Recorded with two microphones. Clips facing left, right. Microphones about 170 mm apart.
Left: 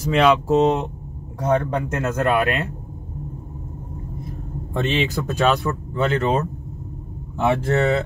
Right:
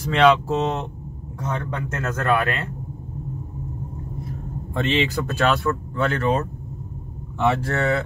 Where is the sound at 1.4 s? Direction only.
50° left (ahead or behind).